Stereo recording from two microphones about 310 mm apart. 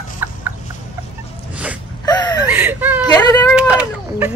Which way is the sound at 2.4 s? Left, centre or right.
Centre.